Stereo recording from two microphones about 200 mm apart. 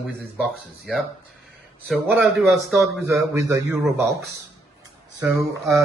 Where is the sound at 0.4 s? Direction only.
5° right (ahead or behind).